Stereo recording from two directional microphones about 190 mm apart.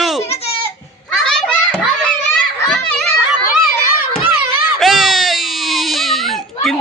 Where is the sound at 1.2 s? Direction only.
5° left (ahead or behind).